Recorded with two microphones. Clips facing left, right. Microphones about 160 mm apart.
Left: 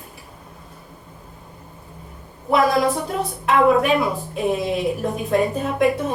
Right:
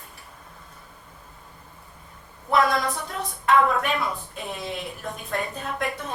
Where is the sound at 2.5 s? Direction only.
5° left (ahead or behind).